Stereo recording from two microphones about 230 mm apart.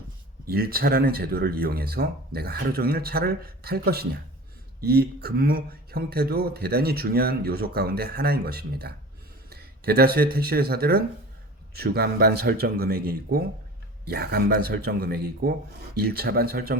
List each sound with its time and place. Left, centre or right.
0.4 s speech: right